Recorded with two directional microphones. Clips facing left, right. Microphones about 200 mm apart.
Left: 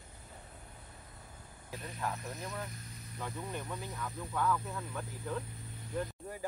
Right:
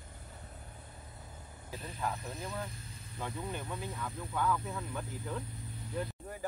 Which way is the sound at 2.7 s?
30° right (ahead or behind).